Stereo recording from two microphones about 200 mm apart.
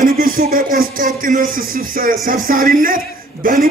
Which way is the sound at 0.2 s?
45° right (ahead or behind).